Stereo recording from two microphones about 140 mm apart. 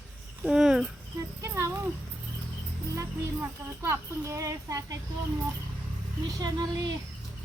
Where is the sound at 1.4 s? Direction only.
20° right (ahead or behind).